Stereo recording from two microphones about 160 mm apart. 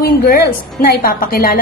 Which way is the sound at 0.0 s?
70° left (ahead or behind).